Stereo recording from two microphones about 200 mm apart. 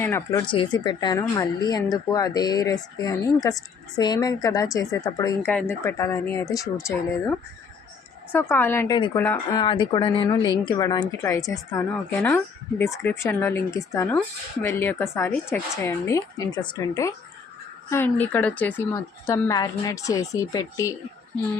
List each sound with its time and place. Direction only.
0.0 s speech: 15° left (ahead or behind)
8.3 s speech: 10° left (ahead or behind)
9.6 s a woman's voice: 25° left (ahead or behind)